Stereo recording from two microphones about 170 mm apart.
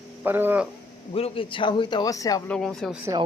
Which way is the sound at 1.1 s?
35° left (ahead or behind).